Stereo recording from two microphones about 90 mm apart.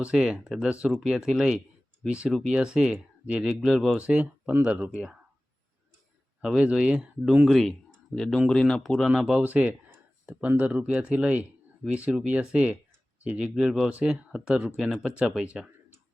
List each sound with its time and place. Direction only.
0.0 s speech: 10° right (ahead or behind)
3.9 s speech: 15° right (ahead or behind)
6.4 s speech: 10° right (ahead or behind); by 9.0 s 5° left (ahead or behind)
9.0 s speech: 5° right (ahead or behind)
9.4 s speech: 20° right (ahead or behind)